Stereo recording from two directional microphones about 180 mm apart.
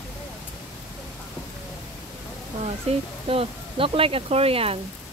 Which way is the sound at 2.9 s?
30° right (ahead or behind).